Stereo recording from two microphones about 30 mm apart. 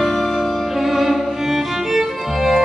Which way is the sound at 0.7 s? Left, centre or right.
Centre.